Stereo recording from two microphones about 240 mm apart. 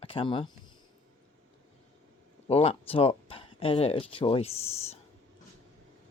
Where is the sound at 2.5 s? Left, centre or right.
Left.